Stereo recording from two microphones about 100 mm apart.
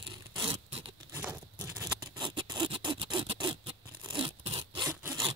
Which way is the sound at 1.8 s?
40° right (ahead or behind).